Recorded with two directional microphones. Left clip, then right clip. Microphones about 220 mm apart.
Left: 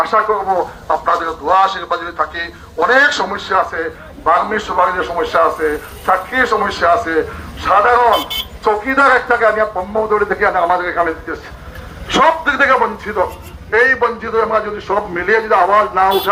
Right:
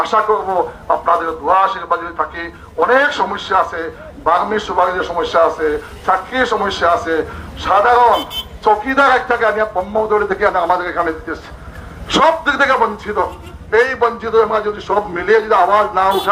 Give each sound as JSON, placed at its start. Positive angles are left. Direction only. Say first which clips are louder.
{"t": 0.0, "sound": "a man's voice", "louder": "even", "side_deg": -40}
{"t": 5.3, "sound": "a man's voice", "louder": "right 1 dB", "side_deg": -40}
{"t": 6.7, "sound": "a man's voice", "louder": "left 1 dB", "side_deg": -40}